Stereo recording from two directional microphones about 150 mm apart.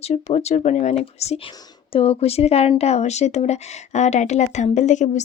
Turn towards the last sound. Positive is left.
turn(degrees=55)  # may be behind; listen again after turning